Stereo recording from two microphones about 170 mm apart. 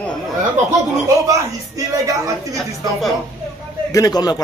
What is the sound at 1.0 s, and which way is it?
Speech, 20° right (ahead or behind).